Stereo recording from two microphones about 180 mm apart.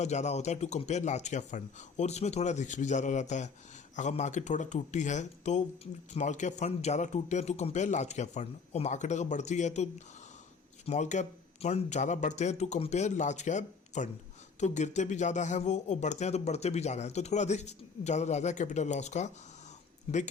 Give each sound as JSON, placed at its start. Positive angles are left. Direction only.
{"t": 0.0, "sound": "speech", "side_deg": 40}